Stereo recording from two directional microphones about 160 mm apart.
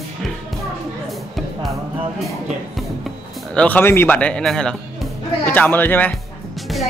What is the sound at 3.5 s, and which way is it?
Speech, 10° left (ahead or behind).